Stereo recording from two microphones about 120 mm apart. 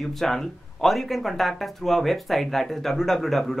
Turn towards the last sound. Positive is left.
turn(degrees=0)  # may be behind; listen again after turning